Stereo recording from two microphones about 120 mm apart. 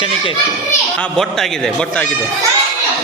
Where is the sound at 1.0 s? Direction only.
5° left (ahead or behind).